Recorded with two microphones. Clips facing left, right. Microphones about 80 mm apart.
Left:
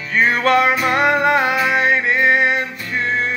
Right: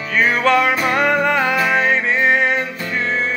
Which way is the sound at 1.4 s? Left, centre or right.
Centre.